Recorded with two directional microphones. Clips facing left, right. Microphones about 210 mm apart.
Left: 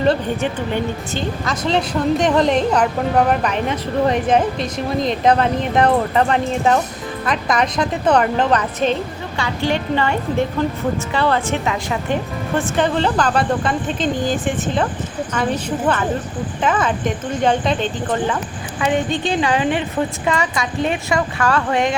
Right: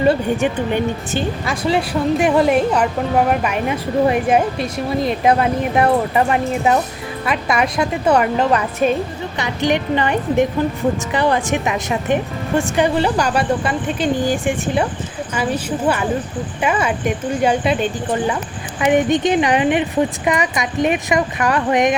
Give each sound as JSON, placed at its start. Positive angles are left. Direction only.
{"t": 0.1, "sound": "a woman's voice", "side_deg": -15}
{"t": 9.4, "sound": "a woman's voice", "side_deg": -15}